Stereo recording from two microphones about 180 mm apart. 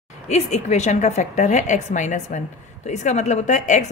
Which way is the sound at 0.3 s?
40° left (ahead or behind).